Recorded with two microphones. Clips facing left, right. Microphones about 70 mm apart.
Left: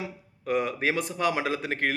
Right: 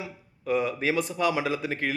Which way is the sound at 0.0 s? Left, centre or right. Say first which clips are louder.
Left 1 dB; left.